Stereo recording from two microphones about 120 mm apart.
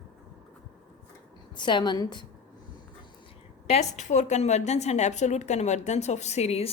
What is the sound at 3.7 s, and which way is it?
A woman's voice, 70° left (ahead or behind).